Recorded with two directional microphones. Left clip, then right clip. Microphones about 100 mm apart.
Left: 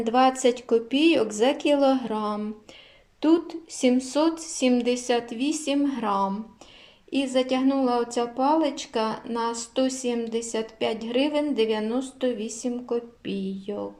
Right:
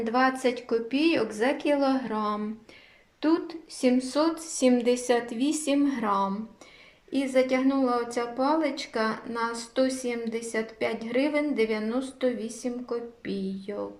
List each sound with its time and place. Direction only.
0.0 s a woman's voice: 25° left (ahead or behind)